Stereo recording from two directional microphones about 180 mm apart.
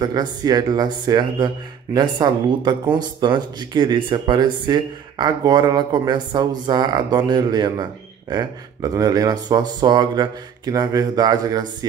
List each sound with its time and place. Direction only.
0.0 s speech: 20° right (ahead or behind)